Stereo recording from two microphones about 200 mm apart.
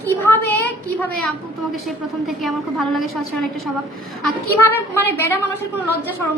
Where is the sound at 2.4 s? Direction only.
Centre (ahead or behind).